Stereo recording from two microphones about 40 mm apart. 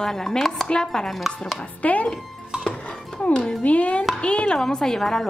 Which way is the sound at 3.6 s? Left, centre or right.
Left.